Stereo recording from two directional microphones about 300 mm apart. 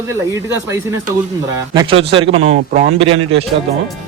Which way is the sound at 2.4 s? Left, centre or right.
Right.